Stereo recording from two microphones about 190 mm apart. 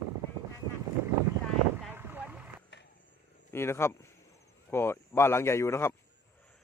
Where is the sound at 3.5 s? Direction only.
15° left (ahead or behind).